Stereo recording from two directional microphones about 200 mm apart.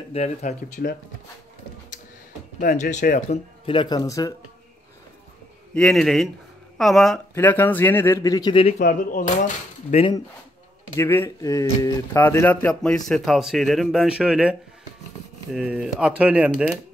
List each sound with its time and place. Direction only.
0.1 s speech: 35° left (ahead or behind)
0.8 s speech: 45° left (ahead or behind)
2.6 s speech: 40° left (ahead or behind); by 4.3 s 15° left (ahead or behind)
5.8 s a man's voice: centre (ahead or behind); by 8.7 s 25° left (ahead or behind)
8.7 s speech: 50° left (ahead or behind)
9.8 s speech: 30° left (ahead or behind)
11.0 s speech: 15° left (ahead or behind); by 16.7 s 5° right (ahead or behind)